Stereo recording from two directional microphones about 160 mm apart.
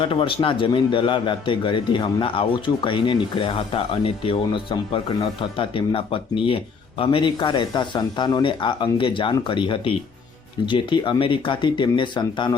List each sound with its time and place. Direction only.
0.0 s a man's voice: 35° left (ahead or behind)